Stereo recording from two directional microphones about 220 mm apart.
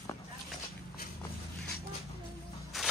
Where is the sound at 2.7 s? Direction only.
Centre (ahead or behind).